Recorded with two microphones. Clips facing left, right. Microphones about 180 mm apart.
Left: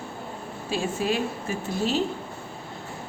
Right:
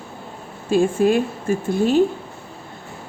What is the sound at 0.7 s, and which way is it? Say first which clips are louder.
Speech: right 10 dB; 50° right (ahead or behind).